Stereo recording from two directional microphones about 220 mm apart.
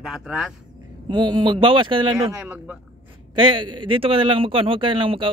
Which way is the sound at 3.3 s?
20° right (ahead or behind).